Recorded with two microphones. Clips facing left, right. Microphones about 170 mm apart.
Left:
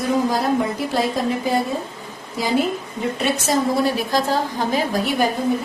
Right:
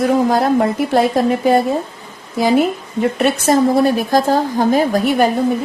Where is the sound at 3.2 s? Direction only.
55° right (ahead or behind).